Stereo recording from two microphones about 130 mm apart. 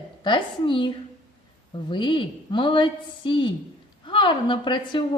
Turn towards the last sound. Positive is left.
turn(degrees=35)  # may be behind; listen again after turning